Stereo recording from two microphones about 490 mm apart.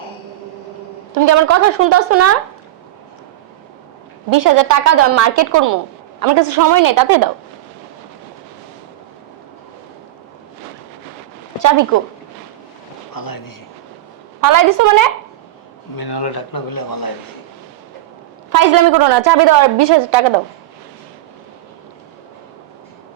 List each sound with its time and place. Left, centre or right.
1.2 s a woman's voice: right
4.3 s a woman's voice: right
13.1 s a man's voice: left
14.4 s a woman's voice: right
16.0 s a man's voice: left
18.5 s a woman's voice: right